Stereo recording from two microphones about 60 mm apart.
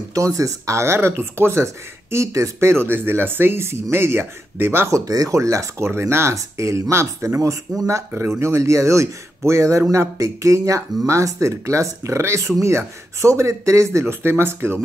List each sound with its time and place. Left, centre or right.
0.1 s speech: right
2.7 s speech: right
4.9 s speech: right
8.1 s speech: right